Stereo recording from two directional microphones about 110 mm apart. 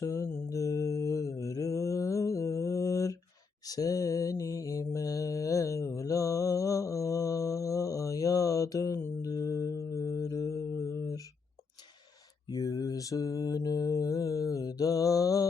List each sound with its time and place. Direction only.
0.0 s mantra: 30° left (ahead or behind)
12.5 s mantra: 35° left (ahead or behind)